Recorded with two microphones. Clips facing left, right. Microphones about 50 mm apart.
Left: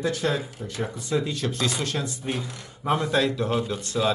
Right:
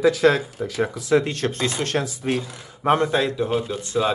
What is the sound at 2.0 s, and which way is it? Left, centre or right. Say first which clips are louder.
Speech: right 5 dB; right.